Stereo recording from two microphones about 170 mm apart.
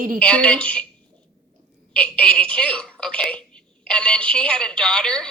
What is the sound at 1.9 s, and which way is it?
A woman's voice, 5° left (ahead or behind).